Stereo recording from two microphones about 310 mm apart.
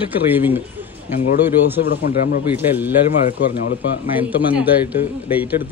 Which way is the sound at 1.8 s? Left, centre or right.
Left.